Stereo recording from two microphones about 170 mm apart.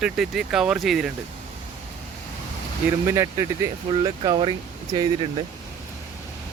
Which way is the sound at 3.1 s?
15° right (ahead or behind).